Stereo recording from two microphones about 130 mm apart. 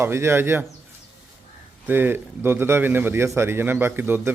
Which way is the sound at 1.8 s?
15° right (ahead or behind).